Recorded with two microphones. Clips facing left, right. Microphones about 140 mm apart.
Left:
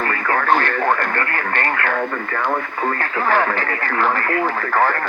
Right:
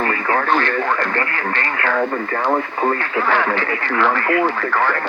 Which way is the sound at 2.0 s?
25° right (ahead or behind).